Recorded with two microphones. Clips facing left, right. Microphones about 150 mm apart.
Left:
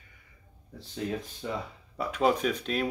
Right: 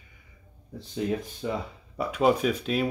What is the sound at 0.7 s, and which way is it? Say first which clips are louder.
Speech: right 5 dB; 15° right (ahead or behind).